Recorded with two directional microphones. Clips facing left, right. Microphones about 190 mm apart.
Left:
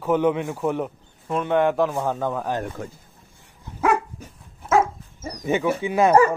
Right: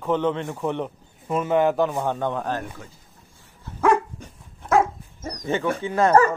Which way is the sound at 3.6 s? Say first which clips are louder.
Right 2 dB; 10° left (ahead or behind).